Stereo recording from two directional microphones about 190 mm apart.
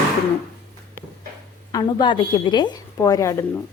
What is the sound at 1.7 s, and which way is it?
A woman's voice, 20° left (ahead or behind).